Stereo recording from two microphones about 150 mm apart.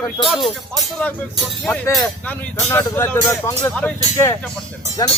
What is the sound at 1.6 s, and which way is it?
Speech, 10° left (ahead or behind).